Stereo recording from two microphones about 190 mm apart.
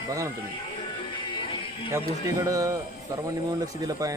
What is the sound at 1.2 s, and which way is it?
Music, 25° left (ahead or behind).